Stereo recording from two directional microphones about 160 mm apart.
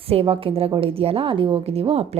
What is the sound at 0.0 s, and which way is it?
A woman's voice, 35° right (ahead or behind).